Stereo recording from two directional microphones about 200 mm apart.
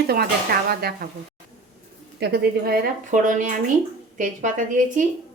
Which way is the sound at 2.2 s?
50° right (ahead or behind).